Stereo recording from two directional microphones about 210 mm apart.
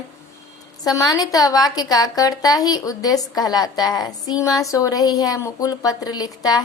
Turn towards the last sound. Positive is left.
turn(degrees=20)  # may be behind; listen again after turning